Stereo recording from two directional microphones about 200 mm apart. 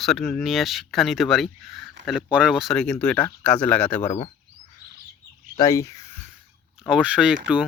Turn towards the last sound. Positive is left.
turn(degrees=-5)  # may be behind; listen again after turning